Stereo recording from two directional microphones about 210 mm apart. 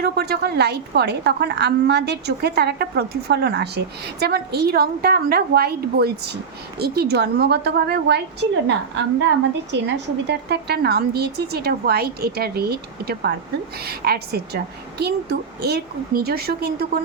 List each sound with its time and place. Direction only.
0.0 s a woman's voice: 50° right (ahead or behind)